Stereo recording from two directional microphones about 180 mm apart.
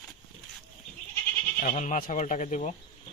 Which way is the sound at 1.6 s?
45° left (ahead or behind).